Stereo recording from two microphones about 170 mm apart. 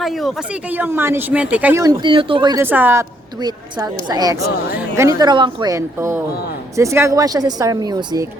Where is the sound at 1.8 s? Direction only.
25° right (ahead or behind).